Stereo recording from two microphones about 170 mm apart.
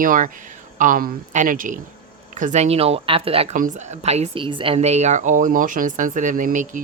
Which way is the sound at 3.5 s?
50° right (ahead or behind).